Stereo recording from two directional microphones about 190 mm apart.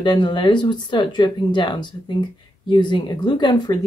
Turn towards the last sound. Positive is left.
turn(degrees=25)  # may be behind; listen again after turning